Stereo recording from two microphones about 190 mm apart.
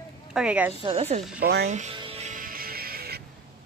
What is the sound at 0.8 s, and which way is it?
Speech, 30° right (ahead or behind).